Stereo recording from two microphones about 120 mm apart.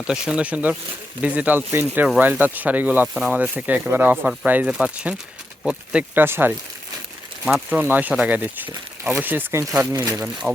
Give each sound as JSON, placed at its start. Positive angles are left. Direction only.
{"t": 0.1, "sound": "speech", "side_deg": -10}